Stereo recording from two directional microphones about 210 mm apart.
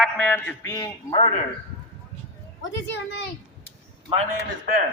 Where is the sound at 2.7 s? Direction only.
55° left (ahead or behind).